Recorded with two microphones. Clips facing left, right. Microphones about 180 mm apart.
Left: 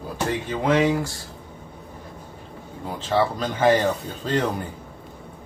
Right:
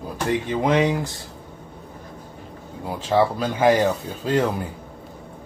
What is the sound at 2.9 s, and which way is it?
Speech, 10° right (ahead or behind).